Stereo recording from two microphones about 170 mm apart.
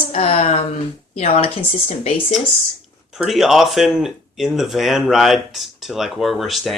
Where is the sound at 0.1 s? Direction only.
35° left (ahead or behind).